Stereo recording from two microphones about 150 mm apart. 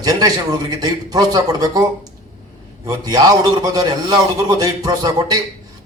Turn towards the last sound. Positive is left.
turn(degrees=-25)  # may be behind; listen again after turning